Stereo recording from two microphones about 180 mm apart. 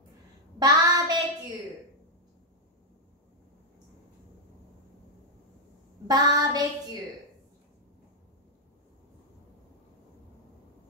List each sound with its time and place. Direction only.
0.6 s child singing: 20° right (ahead or behind)
6.0 s child singing: 20° right (ahead or behind)